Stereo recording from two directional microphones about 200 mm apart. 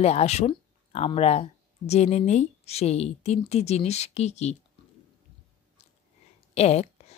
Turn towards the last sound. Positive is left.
turn(degrees=30)  # may be behind; listen again after turning